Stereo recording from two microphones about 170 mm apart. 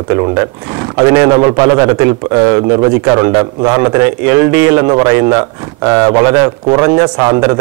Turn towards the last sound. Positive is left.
turn(degrees=-20)  # may be behind; listen again after turning